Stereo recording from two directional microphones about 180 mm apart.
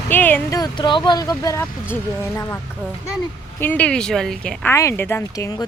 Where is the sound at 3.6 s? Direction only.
10° left (ahead or behind).